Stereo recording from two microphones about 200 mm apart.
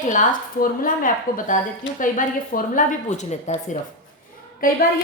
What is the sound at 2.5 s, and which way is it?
A woman's voice, 40° left (ahead or behind).